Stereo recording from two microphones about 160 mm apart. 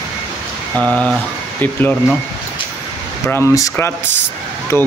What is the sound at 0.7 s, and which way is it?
Speech, 5° left (ahead or behind).